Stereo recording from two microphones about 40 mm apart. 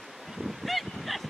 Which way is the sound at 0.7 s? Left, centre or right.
Centre.